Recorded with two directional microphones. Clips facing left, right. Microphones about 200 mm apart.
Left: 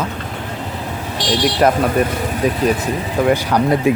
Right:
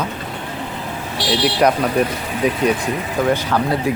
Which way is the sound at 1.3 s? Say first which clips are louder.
Left 1 dB; centre (ahead or behind).